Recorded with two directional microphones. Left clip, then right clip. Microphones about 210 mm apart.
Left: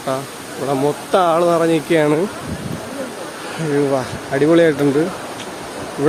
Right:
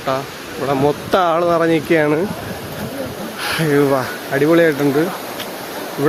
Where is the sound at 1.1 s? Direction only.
20° right (ahead or behind).